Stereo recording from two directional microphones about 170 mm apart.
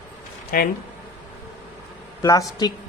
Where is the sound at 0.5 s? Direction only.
55° left (ahead or behind).